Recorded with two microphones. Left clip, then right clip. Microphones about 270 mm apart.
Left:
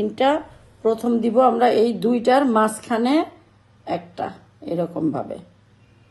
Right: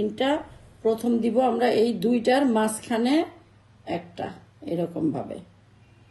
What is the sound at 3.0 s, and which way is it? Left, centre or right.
Speech, left.